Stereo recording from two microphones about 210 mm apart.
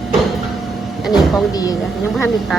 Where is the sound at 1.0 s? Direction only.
Centre (ahead or behind).